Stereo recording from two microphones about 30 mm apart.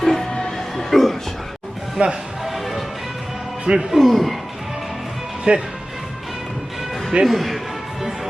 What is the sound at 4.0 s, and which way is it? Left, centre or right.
Speech, centre.